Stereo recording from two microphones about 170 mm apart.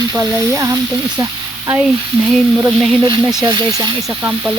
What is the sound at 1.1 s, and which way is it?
Sizzle, 20° right (ahead or behind).